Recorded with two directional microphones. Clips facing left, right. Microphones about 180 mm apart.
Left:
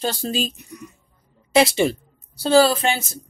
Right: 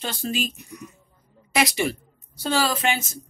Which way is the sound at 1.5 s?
30° left (ahead or behind).